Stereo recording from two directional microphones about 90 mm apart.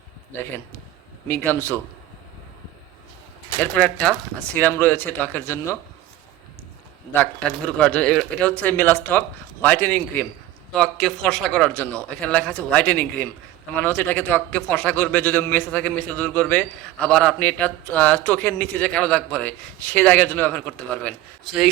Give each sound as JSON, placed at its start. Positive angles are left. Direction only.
{"t": 1.3, "sound": "speech", "side_deg": 20}
{"t": 3.6, "sound": "speech", "side_deg": 15}
{"t": 7.1, "sound": "a man's voice", "side_deg": 20}
{"t": 10.8, "sound": "a man's voice", "side_deg": 5}
{"t": 21.4, "sound": "speech", "side_deg": -5}